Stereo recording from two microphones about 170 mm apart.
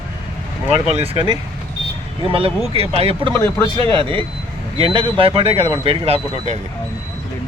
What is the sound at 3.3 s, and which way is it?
Speech, 15° left (ahead or behind).